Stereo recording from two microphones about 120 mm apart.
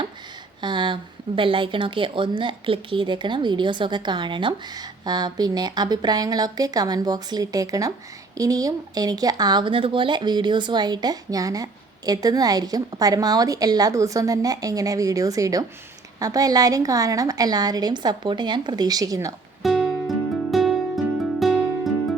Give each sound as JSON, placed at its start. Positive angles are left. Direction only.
{"t": 0.6, "sound": "speech", "side_deg": -40}
{"t": 19.6, "sound": "music", "side_deg": 0}